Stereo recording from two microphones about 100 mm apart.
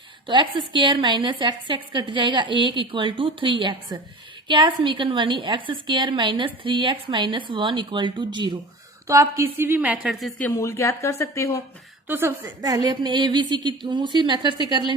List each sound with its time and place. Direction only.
0.3 s a woman's voice: 50° right (ahead or behind)
9.3 s a woman's voice: 25° right (ahead or behind)
10.5 s speech: 30° left (ahead or behind)
12.0 s a woman's voice: 20° right (ahead or behind)
12.6 s a woman's voice: 40° right (ahead or behind)